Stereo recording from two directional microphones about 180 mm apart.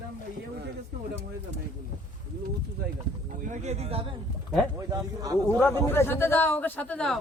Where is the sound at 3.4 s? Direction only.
40° right (ahead or behind).